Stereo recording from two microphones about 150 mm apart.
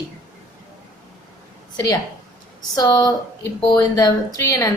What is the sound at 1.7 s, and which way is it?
A woman's voice, 25° left (ahead or behind).